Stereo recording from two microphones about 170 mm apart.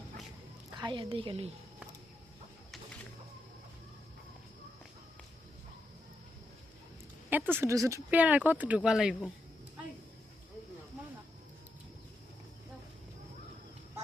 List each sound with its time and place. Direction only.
0.8 s a woman's voice: 25° right (ahead or behind)
7.3 s speech: 10° right (ahead or behind)